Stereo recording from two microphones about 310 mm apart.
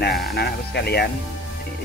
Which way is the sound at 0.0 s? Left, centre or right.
Left.